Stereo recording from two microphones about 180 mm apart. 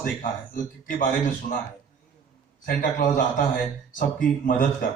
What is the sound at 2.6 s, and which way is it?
Speech, 50° left (ahead or behind).